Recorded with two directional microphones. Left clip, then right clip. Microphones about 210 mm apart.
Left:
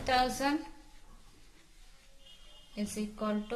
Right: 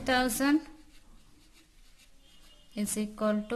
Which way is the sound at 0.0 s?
40° right (ahead or behind).